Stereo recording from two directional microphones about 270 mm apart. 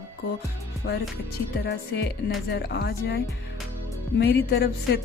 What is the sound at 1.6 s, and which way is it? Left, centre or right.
Speech, left.